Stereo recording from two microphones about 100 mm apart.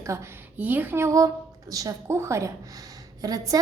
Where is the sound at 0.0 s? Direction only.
30° right (ahead or behind).